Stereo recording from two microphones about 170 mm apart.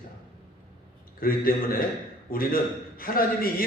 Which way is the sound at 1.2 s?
55° left (ahead or behind).